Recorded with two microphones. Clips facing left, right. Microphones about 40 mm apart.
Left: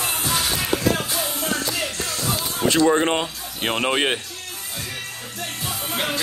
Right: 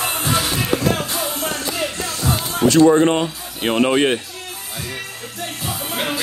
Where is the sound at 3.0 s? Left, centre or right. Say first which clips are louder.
Right 5 dB; centre.